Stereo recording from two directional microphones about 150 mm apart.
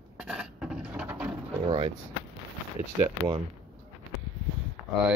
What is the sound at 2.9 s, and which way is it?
Speech, 35° right (ahead or behind).